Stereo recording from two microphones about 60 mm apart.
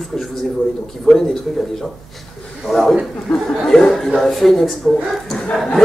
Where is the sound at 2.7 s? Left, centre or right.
Centre.